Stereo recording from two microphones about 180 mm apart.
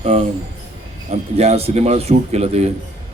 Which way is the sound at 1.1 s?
35° right (ahead or behind).